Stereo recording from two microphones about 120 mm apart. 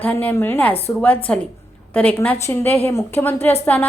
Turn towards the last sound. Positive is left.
turn(degrees=15)  # may be behind; listen again after turning